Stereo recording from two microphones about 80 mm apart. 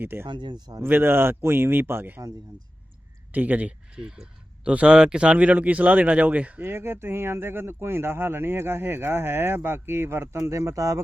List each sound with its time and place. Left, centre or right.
0.0 s speech: right
0.3 s speech: right
0.8 s speech: right
3.3 s speech: centre
6.6 s speech: right